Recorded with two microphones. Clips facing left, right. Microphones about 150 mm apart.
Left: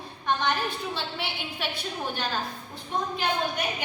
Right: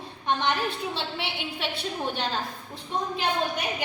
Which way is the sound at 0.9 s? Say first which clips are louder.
Right 1 dB; 25° right (ahead or behind).